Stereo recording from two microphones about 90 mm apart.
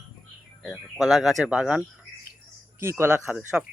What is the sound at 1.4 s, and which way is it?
Speech, 10° right (ahead or behind).